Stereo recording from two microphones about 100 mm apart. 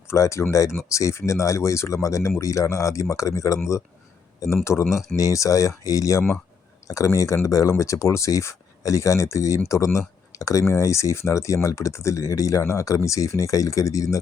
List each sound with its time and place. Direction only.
0.1 s speech: 30° left (ahead or behind)